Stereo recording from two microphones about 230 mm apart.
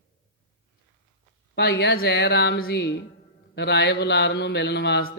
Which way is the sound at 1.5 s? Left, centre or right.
Left.